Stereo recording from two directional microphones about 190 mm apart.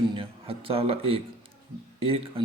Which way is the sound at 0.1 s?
30° right (ahead or behind).